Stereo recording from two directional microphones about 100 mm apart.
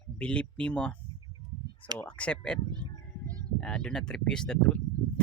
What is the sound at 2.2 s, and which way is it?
Speech, 10° left (ahead or behind).